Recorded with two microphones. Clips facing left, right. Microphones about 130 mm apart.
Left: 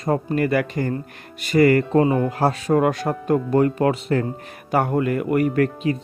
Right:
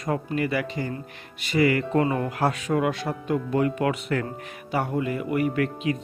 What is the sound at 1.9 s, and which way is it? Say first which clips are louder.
Speech: left 5 dB; 30° left (ahead or behind).